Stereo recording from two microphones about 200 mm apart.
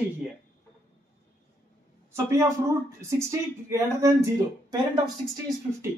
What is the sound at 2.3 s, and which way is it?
Speech, 15° right (ahead or behind).